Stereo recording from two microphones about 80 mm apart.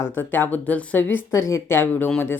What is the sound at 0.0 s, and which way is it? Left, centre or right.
A woman's voice, left.